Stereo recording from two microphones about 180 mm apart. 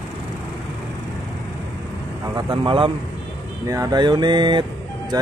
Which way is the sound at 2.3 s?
25° right (ahead or behind).